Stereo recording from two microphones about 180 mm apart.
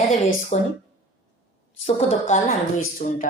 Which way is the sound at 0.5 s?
35° left (ahead or behind).